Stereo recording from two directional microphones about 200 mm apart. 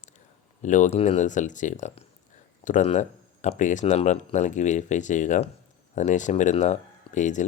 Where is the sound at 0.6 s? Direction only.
40° left (ahead or behind).